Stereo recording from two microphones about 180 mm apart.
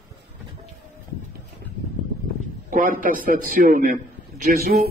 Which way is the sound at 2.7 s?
50° right (ahead or behind).